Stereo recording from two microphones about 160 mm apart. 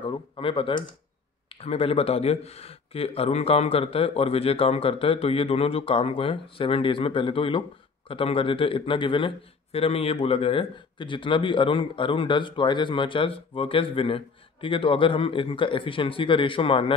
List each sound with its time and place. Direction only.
0.0 s a man's voice: 35° left (ahead or behind)